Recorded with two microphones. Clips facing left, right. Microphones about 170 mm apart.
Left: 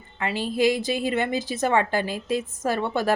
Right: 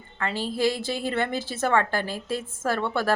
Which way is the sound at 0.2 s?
15° left (ahead or behind).